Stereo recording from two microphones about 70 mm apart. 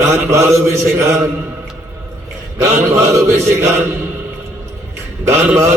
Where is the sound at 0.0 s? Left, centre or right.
Right.